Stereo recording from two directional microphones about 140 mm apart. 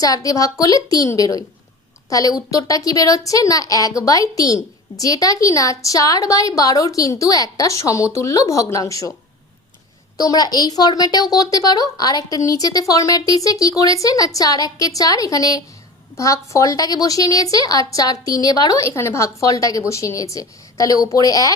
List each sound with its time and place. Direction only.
0.0 s a woman's voice: 25° left (ahead or behind)
10.2 s a woman's voice: 25° left (ahead or behind)